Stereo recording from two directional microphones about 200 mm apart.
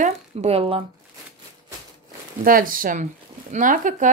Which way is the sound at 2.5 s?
45° right (ahead or behind).